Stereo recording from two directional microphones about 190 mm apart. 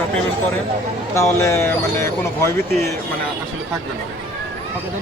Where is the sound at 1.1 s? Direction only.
15° left (ahead or behind).